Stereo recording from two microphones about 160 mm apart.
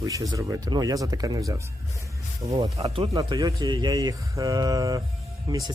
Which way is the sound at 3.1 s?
20° right (ahead or behind).